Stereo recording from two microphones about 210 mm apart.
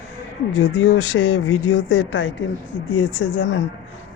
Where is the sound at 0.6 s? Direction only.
75° left (ahead or behind).